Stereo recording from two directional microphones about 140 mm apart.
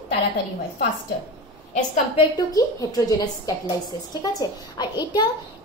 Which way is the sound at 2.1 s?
30° left (ahead or behind).